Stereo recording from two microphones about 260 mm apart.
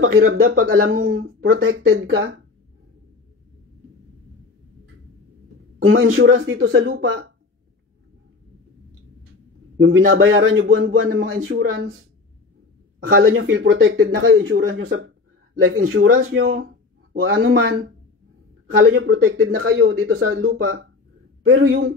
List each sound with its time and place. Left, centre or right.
0.0 s speech: right
5.8 s speech: right
9.8 s speech: right
13.2 s a man's voice: right
18.8 s speech: right